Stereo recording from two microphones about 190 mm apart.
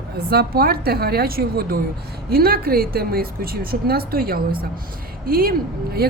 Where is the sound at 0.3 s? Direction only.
55° right (ahead or behind).